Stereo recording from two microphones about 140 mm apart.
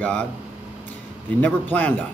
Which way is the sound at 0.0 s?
10° left (ahead or behind).